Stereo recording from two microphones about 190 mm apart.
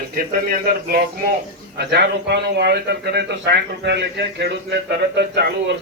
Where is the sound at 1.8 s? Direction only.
60° right (ahead or behind).